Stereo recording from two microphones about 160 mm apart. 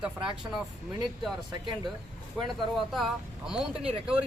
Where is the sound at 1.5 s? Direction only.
30° right (ahead or behind).